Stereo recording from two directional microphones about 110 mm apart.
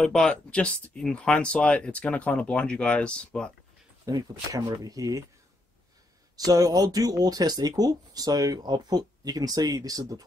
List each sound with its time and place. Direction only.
0.0 s speech: 5° left (ahead or behind)
4.0 s speech: 40° right (ahead or behind)
6.3 s speech: 35° right (ahead or behind)